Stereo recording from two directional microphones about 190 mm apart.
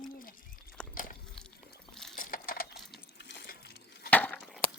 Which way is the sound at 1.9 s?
Centre (ahead or behind).